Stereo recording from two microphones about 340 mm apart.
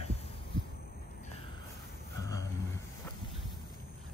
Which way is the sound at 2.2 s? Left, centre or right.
Centre.